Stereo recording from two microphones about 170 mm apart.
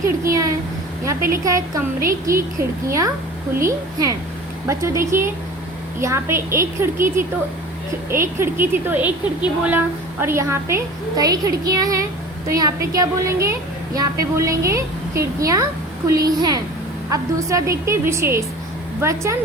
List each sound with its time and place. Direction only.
0.0 s a woman's voice: 20° right (ahead or behind)